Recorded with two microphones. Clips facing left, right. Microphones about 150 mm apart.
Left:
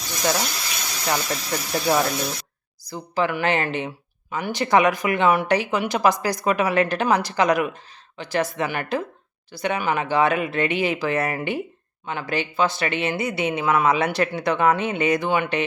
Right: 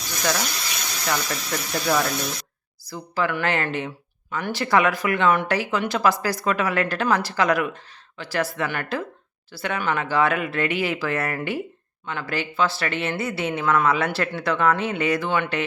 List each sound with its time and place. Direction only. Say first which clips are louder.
0.2 s speech: left 2 dB; 25° left (ahead or behind)